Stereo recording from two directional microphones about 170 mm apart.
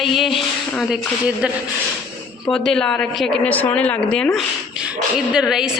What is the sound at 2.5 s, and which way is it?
Speech, 5° left (ahead or behind).